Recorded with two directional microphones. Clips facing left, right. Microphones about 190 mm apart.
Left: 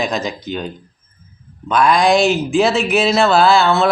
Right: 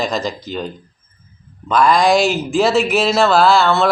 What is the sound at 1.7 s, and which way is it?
Speech, centre (ahead or behind).